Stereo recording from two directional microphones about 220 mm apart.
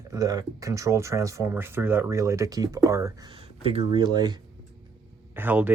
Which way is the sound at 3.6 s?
25° right (ahead or behind).